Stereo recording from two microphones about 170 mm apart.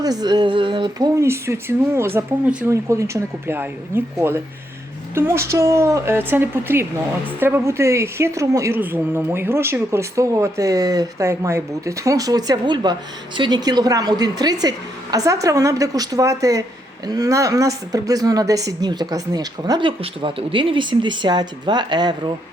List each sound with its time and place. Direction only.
0.0 s a woman's voice: 20° right (ahead or behind)